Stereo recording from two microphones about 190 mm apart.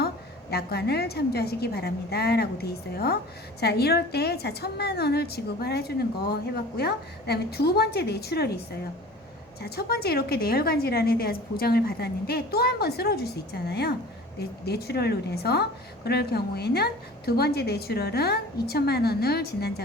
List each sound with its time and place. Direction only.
0.5 s a woman's voice: 55° left (ahead or behind)